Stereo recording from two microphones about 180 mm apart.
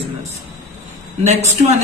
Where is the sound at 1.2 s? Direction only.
35° right (ahead or behind).